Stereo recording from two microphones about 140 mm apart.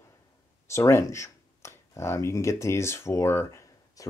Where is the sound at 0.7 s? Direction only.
20° left (ahead or behind).